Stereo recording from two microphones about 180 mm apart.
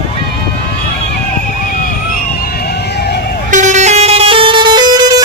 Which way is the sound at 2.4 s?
60° left (ahead or behind).